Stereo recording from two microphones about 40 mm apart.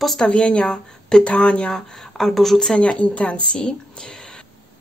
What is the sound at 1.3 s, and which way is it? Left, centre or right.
Speech, left.